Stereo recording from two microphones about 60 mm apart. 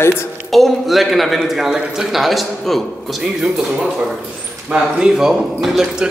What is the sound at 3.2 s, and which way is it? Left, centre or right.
Speech, centre.